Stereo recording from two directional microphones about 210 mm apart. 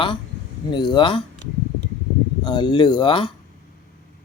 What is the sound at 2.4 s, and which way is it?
Speech, 20° left (ahead or behind).